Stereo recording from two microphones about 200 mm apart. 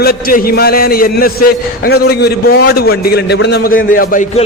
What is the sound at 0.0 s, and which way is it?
A man's voice, 50° left (ahead or behind).